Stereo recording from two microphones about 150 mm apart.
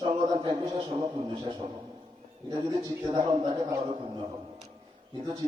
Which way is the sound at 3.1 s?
25° right (ahead or behind).